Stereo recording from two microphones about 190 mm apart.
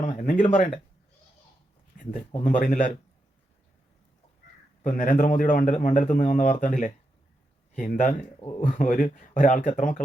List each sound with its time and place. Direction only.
0.0 s speech: 45° left (ahead or behind)
2.0 s speech: 45° left (ahead or behind)
4.8 s speech: 40° left (ahead or behind)